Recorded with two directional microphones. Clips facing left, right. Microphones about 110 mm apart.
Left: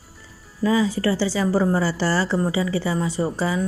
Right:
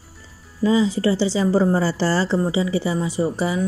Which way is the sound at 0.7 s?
20° right (ahead or behind).